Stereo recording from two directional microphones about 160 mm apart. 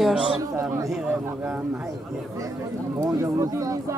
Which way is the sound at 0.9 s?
5° right (ahead or behind).